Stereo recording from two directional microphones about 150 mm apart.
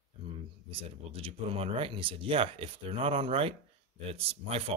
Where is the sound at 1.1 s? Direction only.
40° right (ahead or behind).